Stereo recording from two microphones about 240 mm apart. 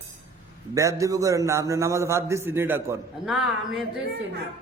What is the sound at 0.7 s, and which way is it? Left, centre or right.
A man's voice, centre.